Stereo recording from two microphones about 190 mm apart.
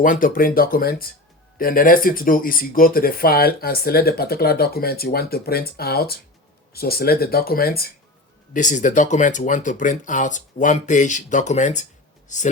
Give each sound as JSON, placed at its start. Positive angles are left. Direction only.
{"t": 0.0, "sound": "speech", "side_deg": 45}
{"t": 8.5, "sound": "speech", "side_deg": 40}